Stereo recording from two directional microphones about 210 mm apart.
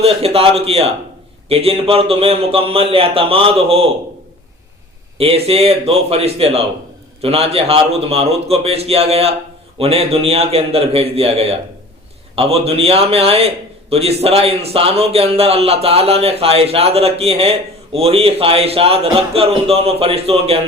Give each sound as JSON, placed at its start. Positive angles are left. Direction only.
{"t": 0.0, "sound": "a man's voice", "side_deg": -30}
{"t": 5.1, "sound": "a man's voice", "side_deg": -25}